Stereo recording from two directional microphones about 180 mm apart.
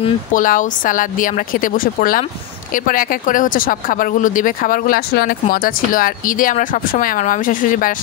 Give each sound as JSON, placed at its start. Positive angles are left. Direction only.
{"t": 0.3, "sound": "speech", "side_deg": 45}